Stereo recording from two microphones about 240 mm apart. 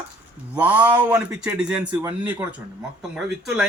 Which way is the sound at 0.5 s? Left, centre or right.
Centre.